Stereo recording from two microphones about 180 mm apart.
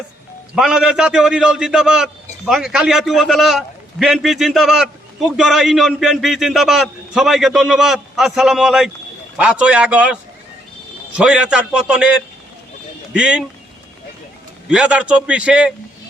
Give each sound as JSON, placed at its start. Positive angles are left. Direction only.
{"t": 0.5, "sound": "a man's voice", "side_deg": -5}
{"t": 13.1, "sound": "a man's voice", "side_deg": -5}
{"t": 14.7, "sound": "a man's voice", "side_deg": -5}